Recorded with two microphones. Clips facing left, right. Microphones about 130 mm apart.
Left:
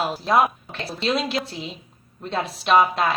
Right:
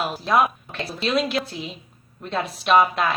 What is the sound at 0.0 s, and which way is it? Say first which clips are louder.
A woman's voice: left 1 dB; 30° left (ahead or behind).